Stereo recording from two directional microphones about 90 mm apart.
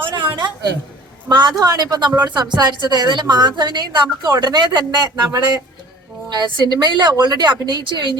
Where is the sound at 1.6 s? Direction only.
45° right (ahead or behind).